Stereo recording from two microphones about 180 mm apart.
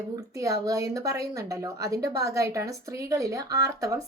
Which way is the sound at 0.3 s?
20° right (ahead or behind).